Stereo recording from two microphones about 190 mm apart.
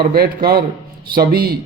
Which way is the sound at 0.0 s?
55° right (ahead or behind).